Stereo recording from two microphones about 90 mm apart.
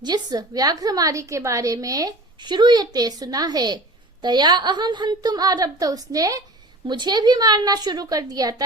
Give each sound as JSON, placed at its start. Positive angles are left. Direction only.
{"t": 0.0, "sound": "a woman's voice", "side_deg": -50}
{"t": 6.8, "sound": "a woman's voice", "side_deg": -55}